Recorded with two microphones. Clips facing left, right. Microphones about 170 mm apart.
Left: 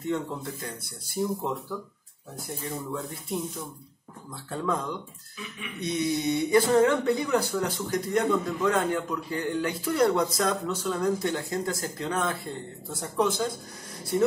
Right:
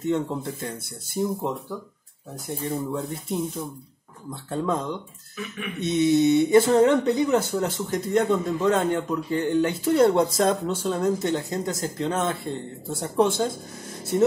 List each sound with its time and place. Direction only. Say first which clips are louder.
0.7 s speech: right 5 dB; 25° right (ahead or behind)
2.6 s speech: right 6 dB; 30° right (ahead or behind)